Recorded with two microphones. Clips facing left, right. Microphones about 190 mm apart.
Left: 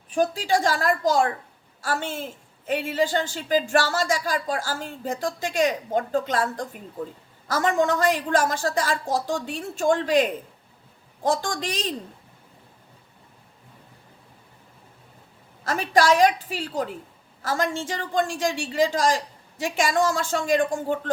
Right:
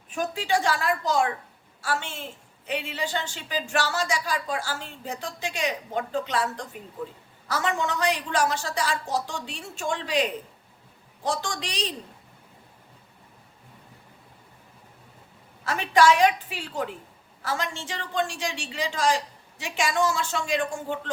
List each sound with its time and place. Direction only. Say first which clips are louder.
0.1 s a woman's voice: left 4 dB; 35° left (ahead or behind)
15.6 s a woman's voice: even; 45° left (ahead or behind)